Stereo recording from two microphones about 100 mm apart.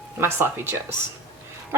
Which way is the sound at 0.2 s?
20° right (ahead or behind).